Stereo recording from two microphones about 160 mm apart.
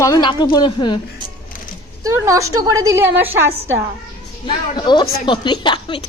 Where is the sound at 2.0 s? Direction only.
20° right (ahead or behind).